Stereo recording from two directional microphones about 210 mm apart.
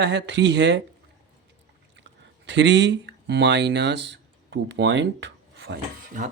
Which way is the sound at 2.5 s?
55° right (ahead or behind).